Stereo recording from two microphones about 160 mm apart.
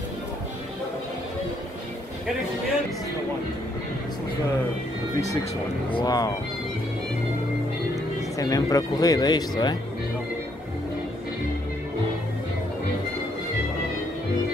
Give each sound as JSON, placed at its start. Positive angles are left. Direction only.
{"t": 5.9, "sound": "speech", "side_deg": 25}
{"t": 8.4, "sound": "speech", "side_deg": 20}